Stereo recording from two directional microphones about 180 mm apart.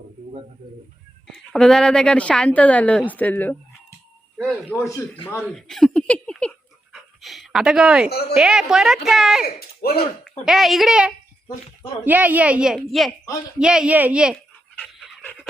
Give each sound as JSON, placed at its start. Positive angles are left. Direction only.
{"t": 1.3, "sound": "speech", "side_deg": 0}
{"t": 4.9, "sound": "speech", "side_deg": 10}
{"t": 6.9, "sound": "pant", "side_deg": 0}
{"t": 8.4, "sound": "speech", "side_deg": -5}
{"t": 9.6, "sound": "speech", "side_deg": 60}
{"t": 10.4, "sound": "a woman's voice", "side_deg": 0}
{"t": 14.9, "sound": "dog", "side_deg": 0}